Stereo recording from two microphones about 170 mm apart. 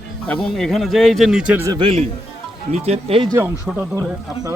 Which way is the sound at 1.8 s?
35° right (ahead or behind).